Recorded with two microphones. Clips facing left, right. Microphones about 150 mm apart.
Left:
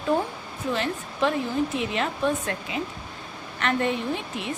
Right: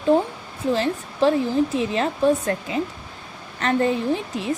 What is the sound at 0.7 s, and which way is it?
A woman's voice, 35° right (ahead or behind).